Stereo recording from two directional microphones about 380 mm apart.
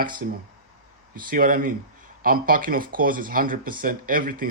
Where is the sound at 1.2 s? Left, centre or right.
Right.